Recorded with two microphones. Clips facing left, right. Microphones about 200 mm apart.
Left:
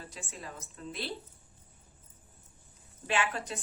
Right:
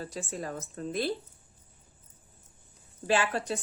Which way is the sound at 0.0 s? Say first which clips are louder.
Right 9 dB; 40° right (ahead or behind).